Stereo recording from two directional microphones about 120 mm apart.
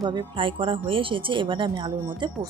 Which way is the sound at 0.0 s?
35° right (ahead or behind).